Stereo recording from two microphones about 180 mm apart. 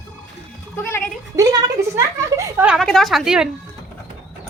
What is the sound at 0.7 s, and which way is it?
Speech, 15° left (ahead or behind).